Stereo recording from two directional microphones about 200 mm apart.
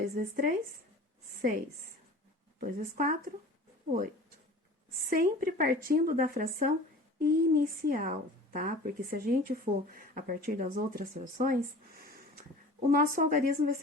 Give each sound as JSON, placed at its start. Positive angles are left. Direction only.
{"t": 0.0, "sound": "a woman's voice", "side_deg": -45}
{"t": 5.0, "sound": "a woman's voice", "side_deg": -45}
{"t": 12.9, "sound": "a woman's voice", "side_deg": -45}